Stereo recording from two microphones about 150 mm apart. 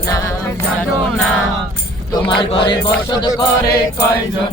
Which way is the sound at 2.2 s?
35° left (ahead or behind).